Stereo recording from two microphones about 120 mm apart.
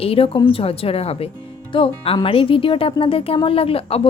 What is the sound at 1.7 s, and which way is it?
Speech, 45° left (ahead or behind).